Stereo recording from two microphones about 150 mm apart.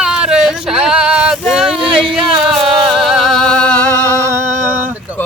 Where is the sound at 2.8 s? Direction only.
Centre (ahead or behind).